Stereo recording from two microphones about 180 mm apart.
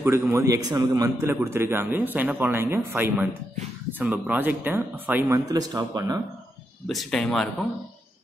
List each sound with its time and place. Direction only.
0.0 s speech: 15° right (ahead or behind)
5.5 s speech: 20° right (ahead or behind)
6.9 s speech: centre (ahead or behind)